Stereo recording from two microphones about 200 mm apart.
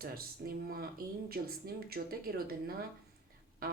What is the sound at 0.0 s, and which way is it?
Speech, 50° right (ahead or behind).